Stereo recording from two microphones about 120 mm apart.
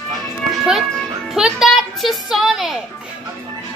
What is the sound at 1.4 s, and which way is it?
A child's voice, 5° right (ahead or behind).